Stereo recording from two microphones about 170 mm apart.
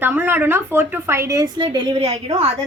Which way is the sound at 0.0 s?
10° right (ahead or behind).